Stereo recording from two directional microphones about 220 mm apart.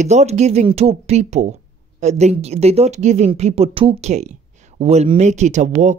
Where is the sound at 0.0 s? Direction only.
30° right (ahead or behind).